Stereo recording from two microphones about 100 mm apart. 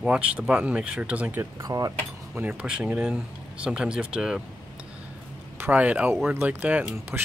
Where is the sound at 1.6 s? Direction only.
35° right (ahead or behind).